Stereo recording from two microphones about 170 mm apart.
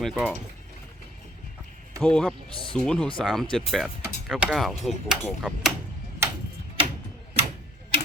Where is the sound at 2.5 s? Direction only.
30° left (ahead or behind).